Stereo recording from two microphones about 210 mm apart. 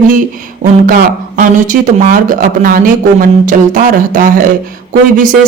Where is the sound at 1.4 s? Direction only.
40° right (ahead or behind).